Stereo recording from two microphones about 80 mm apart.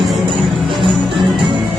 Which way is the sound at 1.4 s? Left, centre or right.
Right.